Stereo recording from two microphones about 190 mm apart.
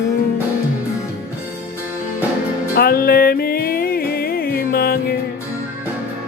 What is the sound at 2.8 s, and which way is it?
Music, 50° left (ahead or behind).